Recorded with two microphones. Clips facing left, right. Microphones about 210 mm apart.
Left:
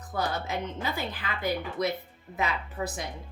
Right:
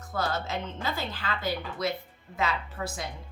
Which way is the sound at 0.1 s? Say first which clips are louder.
Even; 15° left (ahead or behind).